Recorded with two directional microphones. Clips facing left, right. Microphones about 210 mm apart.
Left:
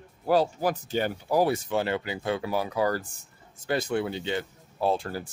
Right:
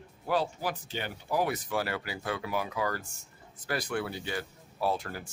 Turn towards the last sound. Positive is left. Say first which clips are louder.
# left 5 dB
turn(degrees=30)  # may be behind; listen again after turning